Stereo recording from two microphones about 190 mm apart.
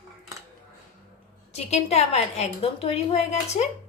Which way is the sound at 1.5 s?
35° left (ahead or behind).